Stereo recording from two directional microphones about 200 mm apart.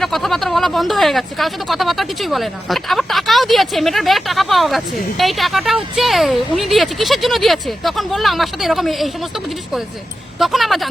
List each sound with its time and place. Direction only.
0.0 s speech: centre (ahead or behind)
10.4 s speech: centre (ahead or behind)